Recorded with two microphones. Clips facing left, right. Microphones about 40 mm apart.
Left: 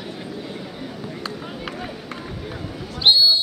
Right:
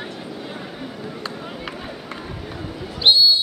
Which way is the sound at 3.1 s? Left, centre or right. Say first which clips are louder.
Even; centre.